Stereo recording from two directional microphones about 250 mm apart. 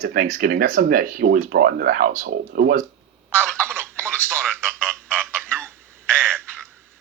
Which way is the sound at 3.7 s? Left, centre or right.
Centre.